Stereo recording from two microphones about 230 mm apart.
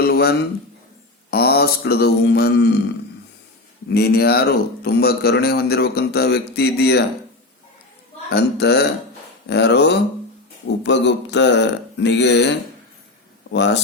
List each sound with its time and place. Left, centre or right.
0.0 s a sound: left
1.3 s speech: left
3.8 s speech: left
8.3 s speech: left
13.5 s speech: left